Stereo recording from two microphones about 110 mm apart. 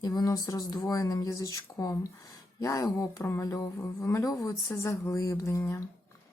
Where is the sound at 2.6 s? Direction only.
30° left (ahead or behind).